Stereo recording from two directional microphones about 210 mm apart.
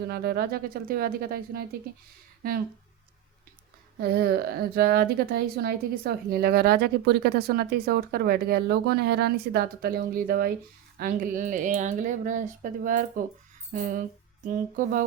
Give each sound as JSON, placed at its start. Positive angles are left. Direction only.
{"t": 0.0, "sound": "a woman's voice", "side_deg": -50}
{"t": 4.0, "sound": "a woman's voice", "side_deg": -50}